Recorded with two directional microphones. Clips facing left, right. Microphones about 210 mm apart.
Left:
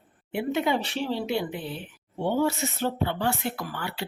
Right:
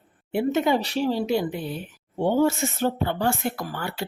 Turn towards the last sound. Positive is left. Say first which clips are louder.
# right 3 dB
turn(degrees=-45)  # may be behind; listen again after turning